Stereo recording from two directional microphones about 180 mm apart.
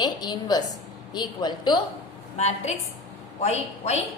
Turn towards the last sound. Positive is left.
turn(degrees=35)  # may be behind; listen again after turning